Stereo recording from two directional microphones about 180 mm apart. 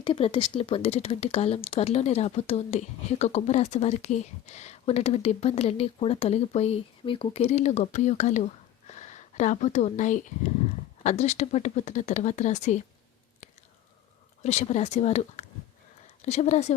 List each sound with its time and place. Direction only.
0.0 s speech: 30° left (ahead or behind)
14.4 s speech: 40° left (ahead or behind)